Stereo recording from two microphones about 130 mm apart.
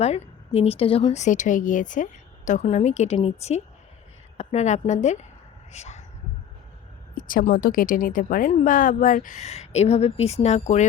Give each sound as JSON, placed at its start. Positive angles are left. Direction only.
{"t": 0.0, "sound": "speech", "side_deg": 50}
{"t": 2.6, "sound": "speech", "side_deg": 60}
{"t": 7.2, "sound": "speech", "side_deg": 90}